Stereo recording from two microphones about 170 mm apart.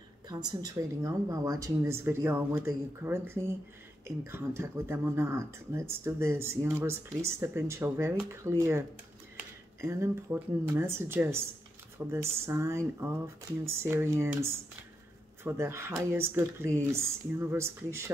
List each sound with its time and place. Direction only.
0.3 s speech: 25° right (ahead or behind)